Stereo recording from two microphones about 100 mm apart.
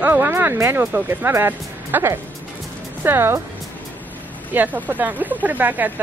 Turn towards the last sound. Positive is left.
turn(degrees=-15)  # may be behind; listen again after turning